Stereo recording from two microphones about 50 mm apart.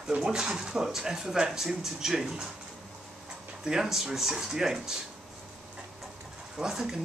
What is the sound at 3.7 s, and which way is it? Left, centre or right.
Speech, centre.